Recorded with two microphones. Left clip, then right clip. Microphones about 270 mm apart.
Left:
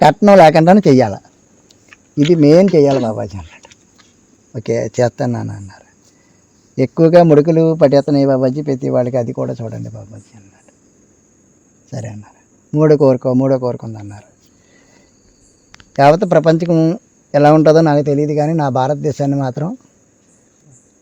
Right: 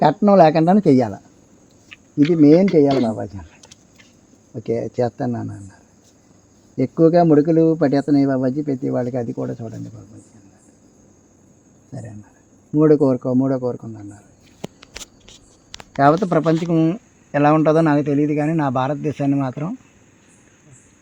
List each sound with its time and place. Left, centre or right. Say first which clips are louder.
0.0 s speech: left 6 dB; left
11.9 s speech: left 8 dB; left
16.0 s speech: left 6 dB; left